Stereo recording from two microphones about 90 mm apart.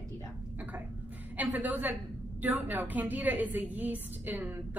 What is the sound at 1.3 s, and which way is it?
A woman's voice, 20° right (ahead or behind).